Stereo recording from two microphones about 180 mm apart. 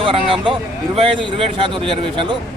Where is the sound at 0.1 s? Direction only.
30° right (ahead or behind).